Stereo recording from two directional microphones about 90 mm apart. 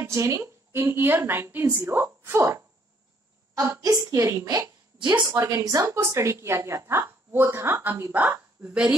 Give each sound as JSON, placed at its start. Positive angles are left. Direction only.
{"t": 0.0, "sound": "a woman's voice", "side_deg": -35}